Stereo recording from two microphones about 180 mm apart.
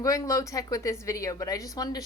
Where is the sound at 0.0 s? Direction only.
20° left (ahead or behind).